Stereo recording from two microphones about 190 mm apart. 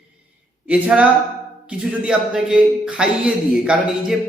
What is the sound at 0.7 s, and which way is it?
A man's voice, 5° right (ahead or behind).